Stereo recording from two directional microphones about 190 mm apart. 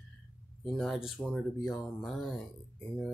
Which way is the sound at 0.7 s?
Centre (ahead or behind).